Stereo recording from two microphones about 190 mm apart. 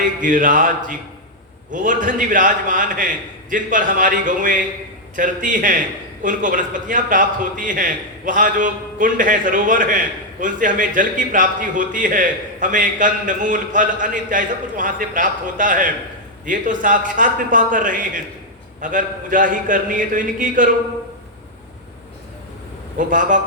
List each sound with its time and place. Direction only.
0.0 s a man's voice: 45° right (ahead or behind)
23.0 s a man's voice: 45° right (ahead or behind)